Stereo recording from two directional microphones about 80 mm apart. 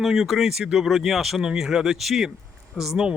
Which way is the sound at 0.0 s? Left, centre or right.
Centre.